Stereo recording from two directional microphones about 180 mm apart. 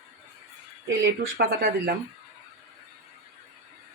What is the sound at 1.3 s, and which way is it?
Speech, 55° right (ahead or behind).